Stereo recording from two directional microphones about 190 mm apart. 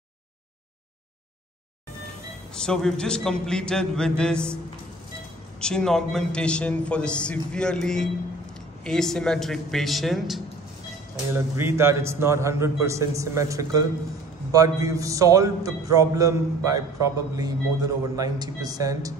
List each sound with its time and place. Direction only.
2.5 s a man's voice: 5° left (ahead or behind)
5.6 s a man's voice: 5° left (ahead or behind)
11.3 s a man's voice: 15° right (ahead or behind)